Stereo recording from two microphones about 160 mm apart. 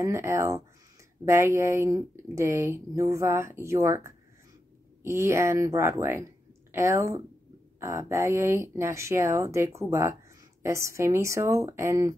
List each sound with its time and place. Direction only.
0.0 s speech: 20° right (ahead or behind)